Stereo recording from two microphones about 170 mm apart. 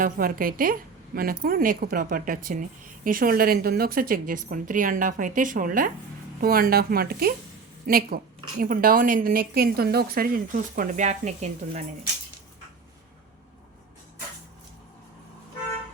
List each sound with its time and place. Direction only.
0.0 s a woman's voice: 55° right (ahead or behind)